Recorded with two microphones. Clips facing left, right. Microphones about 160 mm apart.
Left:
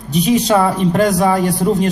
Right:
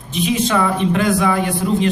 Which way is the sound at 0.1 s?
40° left (ahead or behind).